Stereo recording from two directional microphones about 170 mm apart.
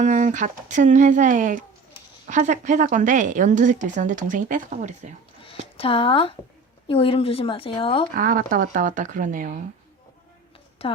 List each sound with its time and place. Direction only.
0.0 s a woman's voice: 45° right (ahead or behind)
5.7 s speech: 30° left (ahead or behind)
8.1 s a woman's voice: 55° right (ahead or behind)